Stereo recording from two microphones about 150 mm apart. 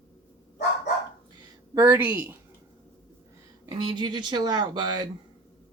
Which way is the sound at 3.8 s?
30° right (ahead or behind).